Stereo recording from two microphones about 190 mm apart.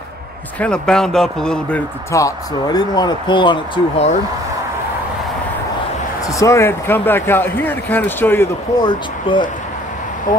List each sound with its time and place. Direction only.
0.6 s speech: 5° left (ahead or behind)
2.1 s speech: 20° left (ahead or behind)
6.4 s speech: 15° left (ahead or behind)
8.8 s speech: 25° left (ahead or behind)